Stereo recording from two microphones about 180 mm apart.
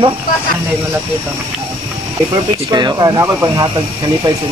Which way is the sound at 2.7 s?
20° right (ahead or behind).